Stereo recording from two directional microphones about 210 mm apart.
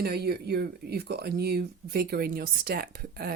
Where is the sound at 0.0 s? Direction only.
50° right (ahead or behind).